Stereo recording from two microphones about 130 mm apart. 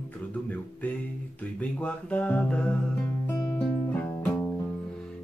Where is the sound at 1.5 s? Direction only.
10° left (ahead or behind).